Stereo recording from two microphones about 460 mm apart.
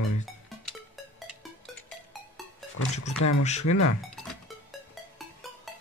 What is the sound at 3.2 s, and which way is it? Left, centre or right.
Speech, left.